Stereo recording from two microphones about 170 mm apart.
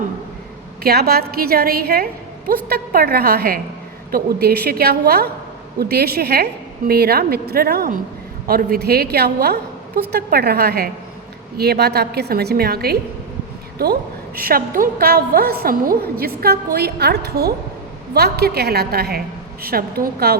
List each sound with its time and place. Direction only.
0.8 s a woman's voice: 65° right (ahead or behind)